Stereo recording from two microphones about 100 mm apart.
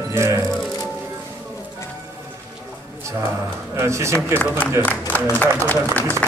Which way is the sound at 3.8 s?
30° right (ahead or behind).